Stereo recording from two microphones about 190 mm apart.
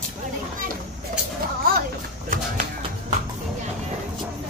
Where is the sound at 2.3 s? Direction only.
45° right (ahead or behind).